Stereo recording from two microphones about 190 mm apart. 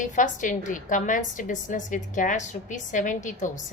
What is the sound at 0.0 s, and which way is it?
A woman's voice, 40° left (ahead or behind).